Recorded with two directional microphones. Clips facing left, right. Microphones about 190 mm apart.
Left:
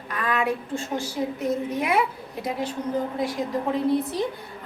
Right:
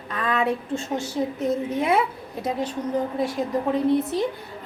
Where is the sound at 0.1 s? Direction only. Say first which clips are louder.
Right 2 dB; 25° right (ahead or behind).